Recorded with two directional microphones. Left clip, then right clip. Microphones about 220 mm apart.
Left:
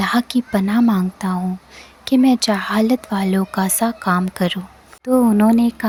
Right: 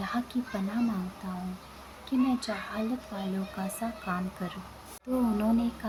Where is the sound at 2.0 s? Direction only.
45° left (ahead or behind).